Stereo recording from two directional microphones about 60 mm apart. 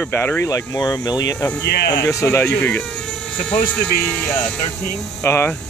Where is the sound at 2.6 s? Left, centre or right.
Centre.